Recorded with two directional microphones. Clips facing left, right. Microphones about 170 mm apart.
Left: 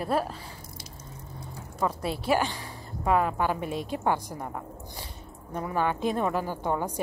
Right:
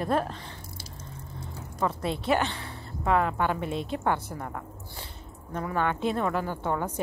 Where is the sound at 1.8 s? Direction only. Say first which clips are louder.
Even; 10° left (ahead or behind).